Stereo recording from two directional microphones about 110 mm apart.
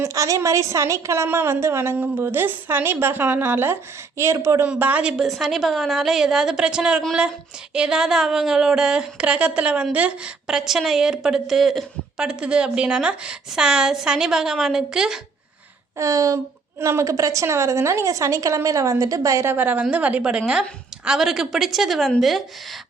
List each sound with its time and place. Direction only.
0.0 s a woman's voice: 30° right (ahead or behind)
4.6 s speech: 15° right (ahead or behind)
16.0 s a woman's voice: 30° right (ahead or behind); by 22.4 s centre (ahead or behind)